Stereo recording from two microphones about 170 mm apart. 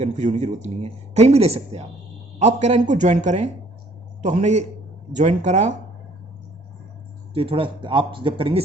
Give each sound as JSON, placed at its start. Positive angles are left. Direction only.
{"t": 0.0, "sound": "speech", "side_deg": -45}
{"t": 7.3, "sound": "speech", "side_deg": -35}